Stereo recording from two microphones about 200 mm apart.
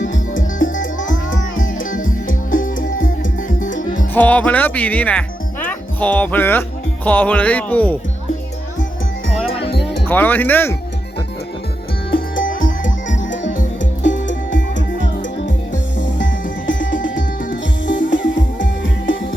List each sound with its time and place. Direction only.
0.9 s music: 70° left (ahead or behind)
1.5 s music: 40° left (ahead or behind)
4.1 s speech: 10° left (ahead or behind)
10.1 s speech: 10° left (ahead or behind)
14.3 s music: 65° left (ahead or behind)